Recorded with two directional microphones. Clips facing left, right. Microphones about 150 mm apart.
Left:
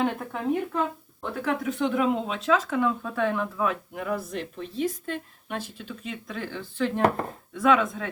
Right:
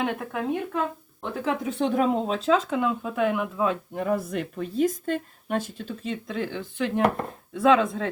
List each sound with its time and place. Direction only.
0.0 s speech: 5° right (ahead or behind)
1.2 s speech: 20° right (ahead or behind)
1.8 s speech: 35° right (ahead or behind); by 3.7 s 15° right (ahead or behind)
3.7 s a woman's voice: 35° right (ahead or behind)
4.1 s a woman's voice: 50° right (ahead or behind); by 6.1 s 35° right (ahead or behind)
6.2 s speech: 20° right (ahead or behind)